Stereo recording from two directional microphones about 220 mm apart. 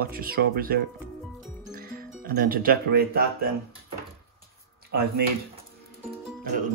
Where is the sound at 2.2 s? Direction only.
40° right (ahead or behind).